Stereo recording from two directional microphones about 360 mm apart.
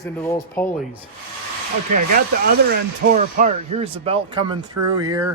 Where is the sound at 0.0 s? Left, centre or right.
Centre.